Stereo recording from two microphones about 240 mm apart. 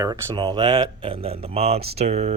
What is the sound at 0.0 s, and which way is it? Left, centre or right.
Speech, centre.